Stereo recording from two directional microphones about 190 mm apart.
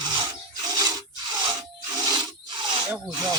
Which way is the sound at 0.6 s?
20° right (ahead or behind).